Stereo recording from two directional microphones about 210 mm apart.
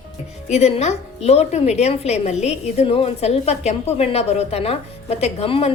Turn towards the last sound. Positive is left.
turn(degrees=30)  # may be behind; listen again after turning